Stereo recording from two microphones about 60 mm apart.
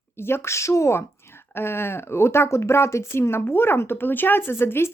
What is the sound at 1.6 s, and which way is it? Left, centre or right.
Speech, left.